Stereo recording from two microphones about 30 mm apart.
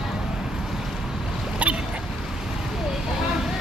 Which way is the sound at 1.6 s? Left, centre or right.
Right.